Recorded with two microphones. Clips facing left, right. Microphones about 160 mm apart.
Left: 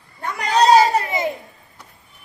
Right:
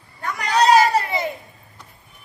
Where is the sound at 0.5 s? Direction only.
35° left (ahead or behind).